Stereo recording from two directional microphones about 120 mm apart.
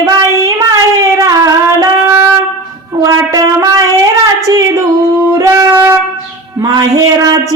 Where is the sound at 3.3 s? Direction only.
25° right (ahead or behind).